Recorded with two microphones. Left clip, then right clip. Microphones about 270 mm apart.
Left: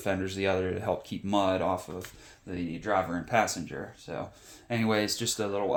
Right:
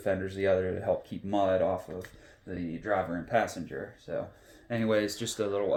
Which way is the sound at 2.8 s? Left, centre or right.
Left.